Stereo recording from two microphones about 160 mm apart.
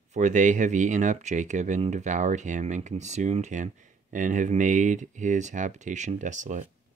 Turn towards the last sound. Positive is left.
turn(degrees=-50)  # may be behind; listen again after turning